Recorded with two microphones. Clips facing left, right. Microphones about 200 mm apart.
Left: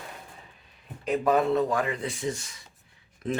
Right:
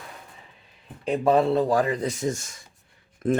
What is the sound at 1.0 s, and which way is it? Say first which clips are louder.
Speech: right 3 dB; 30° right (ahead or behind).